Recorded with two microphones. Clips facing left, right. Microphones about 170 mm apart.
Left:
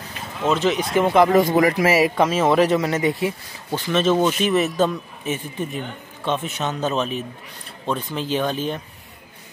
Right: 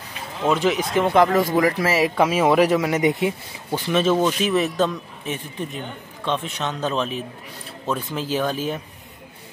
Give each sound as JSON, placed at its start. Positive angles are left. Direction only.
{"t": 0.5, "sound": "speech", "side_deg": -10}
{"t": 1.3, "sound": "speech", "side_deg": 20}
{"t": 2.1, "sound": "speech", "side_deg": -10}
{"t": 3.0, "sound": "speech", "side_deg": -20}
{"t": 3.9, "sound": "speech", "side_deg": -5}